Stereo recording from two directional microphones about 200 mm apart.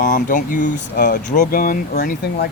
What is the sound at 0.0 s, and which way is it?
Speech, 40° left (ahead or behind).